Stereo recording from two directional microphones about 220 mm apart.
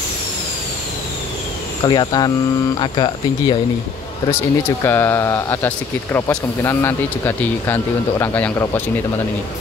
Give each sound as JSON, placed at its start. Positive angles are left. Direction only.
{"t": 1.9, "sound": "speech", "side_deg": 20}
{"t": 4.8, "sound": "speech", "side_deg": 10}